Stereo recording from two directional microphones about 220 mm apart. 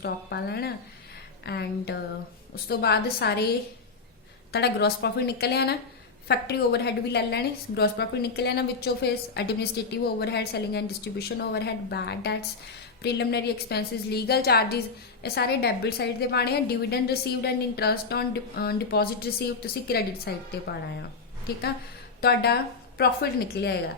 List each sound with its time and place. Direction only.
0.0 s a woman's voice: 45° left (ahead or behind)
4.5 s a woman's voice: 50° left (ahead or behind)
22.2 s a woman's voice: 45° left (ahead or behind)